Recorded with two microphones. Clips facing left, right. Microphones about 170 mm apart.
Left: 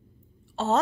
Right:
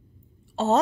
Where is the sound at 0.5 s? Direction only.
20° right (ahead or behind).